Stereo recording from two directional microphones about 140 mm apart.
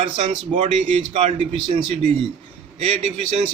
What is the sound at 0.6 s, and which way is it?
A man's voice, 50° right (ahead or behind).